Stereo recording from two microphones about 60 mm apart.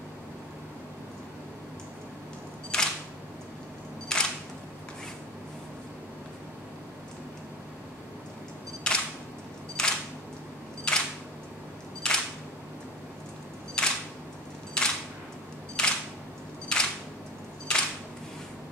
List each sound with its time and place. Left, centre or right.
2.7 s single-lens reflex camera: centre
4.1 s single-lens reflex camera: centre
8.8 s single-lens reflex camera: centre
12.0 s single-lens reflex camera: centre
13.8 s single-lens reflex camera: centre
17.7 s camera: centre